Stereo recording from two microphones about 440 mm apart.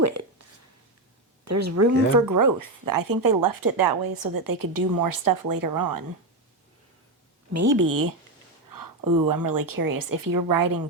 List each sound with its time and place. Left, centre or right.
1.5 s speech: right
7.5 s speech: right